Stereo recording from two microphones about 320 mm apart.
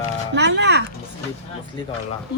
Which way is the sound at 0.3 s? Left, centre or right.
Right.